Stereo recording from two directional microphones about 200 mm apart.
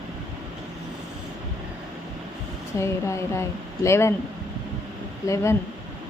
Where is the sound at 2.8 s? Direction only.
15° left (ahead or behind).